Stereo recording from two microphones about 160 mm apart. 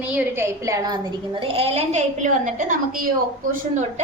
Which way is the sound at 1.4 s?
35° right (ahead or behind).